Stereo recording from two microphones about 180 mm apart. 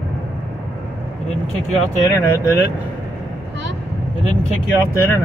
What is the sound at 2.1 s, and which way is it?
Speech, 15° left (ahead or behind).